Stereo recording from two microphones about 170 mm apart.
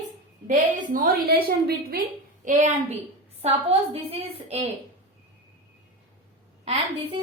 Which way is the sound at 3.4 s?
35° right (ahead or behind).